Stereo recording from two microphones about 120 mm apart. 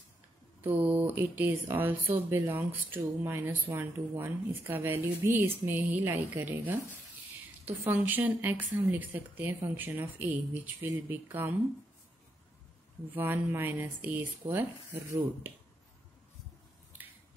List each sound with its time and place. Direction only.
0.6 s speech: 15° right (ahead or behind)
7.8 s speech: 15° right (ahead or behind)
13.1 s speech: 15° right (ahead or behind)